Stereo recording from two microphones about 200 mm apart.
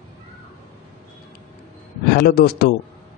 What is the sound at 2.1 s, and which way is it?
Speech, 50° left (ahead or behind).